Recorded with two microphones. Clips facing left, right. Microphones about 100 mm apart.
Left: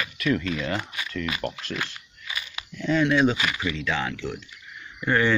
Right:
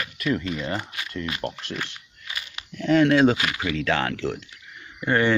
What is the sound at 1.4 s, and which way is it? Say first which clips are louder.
Speech: even; 20° right (ahead or behind).